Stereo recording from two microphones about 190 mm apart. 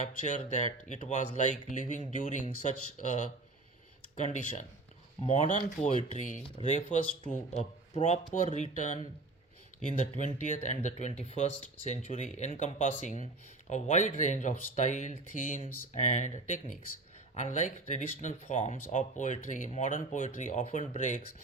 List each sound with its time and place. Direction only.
0.0 s speech: 40° left (ahead or behind)
5.2 s speech: 40° left (ahead or behind)